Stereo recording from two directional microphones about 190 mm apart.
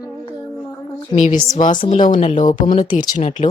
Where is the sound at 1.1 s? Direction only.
40° left (ahead or behind).